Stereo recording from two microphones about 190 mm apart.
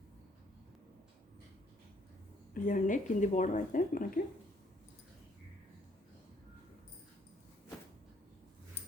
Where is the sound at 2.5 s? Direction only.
45° left (ahead or behind).